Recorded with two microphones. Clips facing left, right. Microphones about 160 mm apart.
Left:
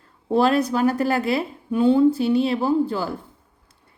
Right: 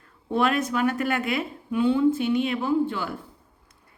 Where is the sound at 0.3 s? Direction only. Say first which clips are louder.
Left 5 dB; 35° left (ahead or behind).